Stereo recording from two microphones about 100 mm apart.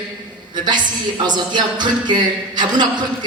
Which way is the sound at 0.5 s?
50° right (ahead or behind).